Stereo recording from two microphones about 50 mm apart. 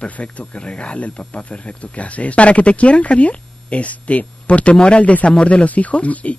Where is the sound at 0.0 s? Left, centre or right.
Left.